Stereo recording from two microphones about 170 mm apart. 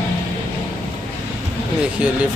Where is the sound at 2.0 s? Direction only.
5° right (ahead or behind).